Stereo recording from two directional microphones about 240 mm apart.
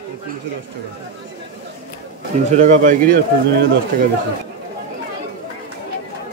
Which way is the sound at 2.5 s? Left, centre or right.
Right.